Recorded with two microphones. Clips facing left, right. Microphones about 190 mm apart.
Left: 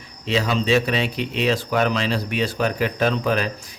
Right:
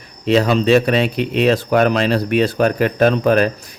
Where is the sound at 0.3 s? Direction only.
60° right (ahead or behind).